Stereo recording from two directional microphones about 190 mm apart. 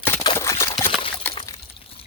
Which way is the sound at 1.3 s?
25° left (ahead or behind).